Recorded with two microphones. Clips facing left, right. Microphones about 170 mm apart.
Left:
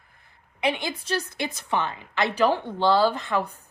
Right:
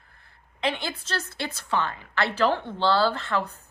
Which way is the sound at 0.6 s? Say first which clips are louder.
Left 2 dB; 15° left (ahead or behind).